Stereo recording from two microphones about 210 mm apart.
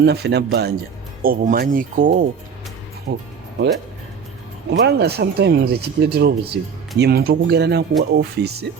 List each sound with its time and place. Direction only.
0.0 s speech: 50° right (ahead or behind)
3.1 s speech: 55° right (ahead or behind)
4.7 s speech: 50° right (ahead or behind)